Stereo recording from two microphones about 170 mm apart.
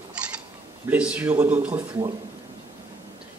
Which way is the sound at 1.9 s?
25° right (ahead or behind).